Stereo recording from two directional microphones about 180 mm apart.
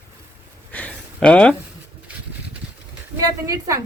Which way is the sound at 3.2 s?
20° right (ahead or behind).